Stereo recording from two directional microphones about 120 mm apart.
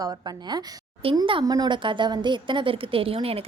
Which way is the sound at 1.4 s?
35° right (ahead or behind).